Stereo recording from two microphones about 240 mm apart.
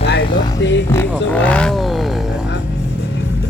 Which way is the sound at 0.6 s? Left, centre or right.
Left.